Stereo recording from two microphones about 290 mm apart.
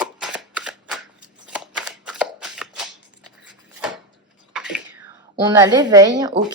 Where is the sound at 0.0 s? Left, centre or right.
Centre.